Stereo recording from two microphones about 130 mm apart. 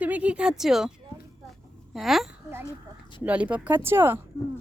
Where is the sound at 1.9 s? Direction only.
Centre (ahead or behind).